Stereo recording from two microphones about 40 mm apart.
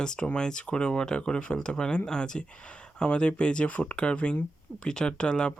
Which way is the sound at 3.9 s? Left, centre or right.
Left.